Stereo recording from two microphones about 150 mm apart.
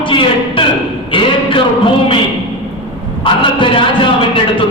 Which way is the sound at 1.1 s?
35° left (ahead or behind).